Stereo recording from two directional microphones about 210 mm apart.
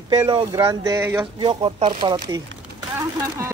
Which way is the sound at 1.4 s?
25° right (ahead or behind).